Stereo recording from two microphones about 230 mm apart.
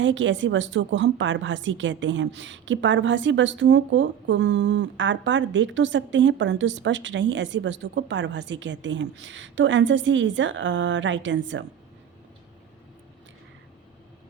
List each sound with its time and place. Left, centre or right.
0.0 s a woman's voice: right